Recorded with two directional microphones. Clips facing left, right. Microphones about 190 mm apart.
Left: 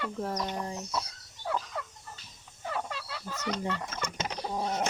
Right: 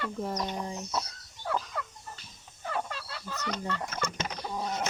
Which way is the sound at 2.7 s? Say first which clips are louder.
Right 1 dB; 10° left (ahead or behind).